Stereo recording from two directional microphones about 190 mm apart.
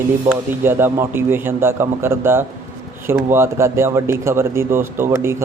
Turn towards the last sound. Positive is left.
turn(degrees=-15)  # may be behind; listen again after turning